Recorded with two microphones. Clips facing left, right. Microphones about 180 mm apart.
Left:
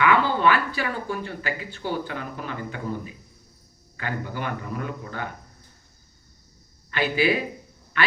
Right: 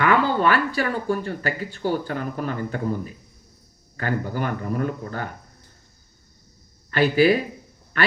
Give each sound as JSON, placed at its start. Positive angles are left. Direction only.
{"t": 0.0, "sound": "speech", "side_deg": -45}
{"t": 6.9, "sound": "a man's voice", "side_deg": -40}